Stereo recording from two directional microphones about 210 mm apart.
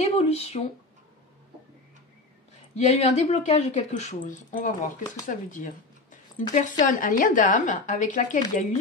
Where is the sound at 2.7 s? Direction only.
30° left (ahead or behind).